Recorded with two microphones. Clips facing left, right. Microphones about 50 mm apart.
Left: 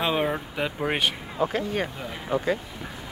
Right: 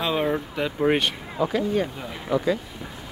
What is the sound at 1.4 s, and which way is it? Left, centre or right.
Speech, left.